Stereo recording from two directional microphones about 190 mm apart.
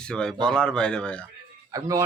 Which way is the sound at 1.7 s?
20° right (ahead or behind).